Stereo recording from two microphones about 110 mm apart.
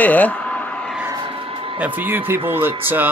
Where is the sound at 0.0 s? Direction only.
15° left (ahead or behind).